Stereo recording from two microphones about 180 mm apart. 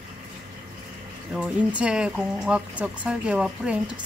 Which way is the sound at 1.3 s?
5° right (ahead or behind).